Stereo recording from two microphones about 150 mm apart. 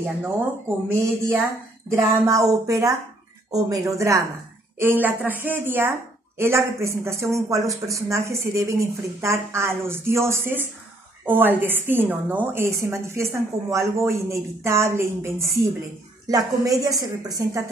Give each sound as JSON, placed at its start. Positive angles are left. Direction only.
{"t": 0.2, "sound": "a woman's voice", "side_deg": -15}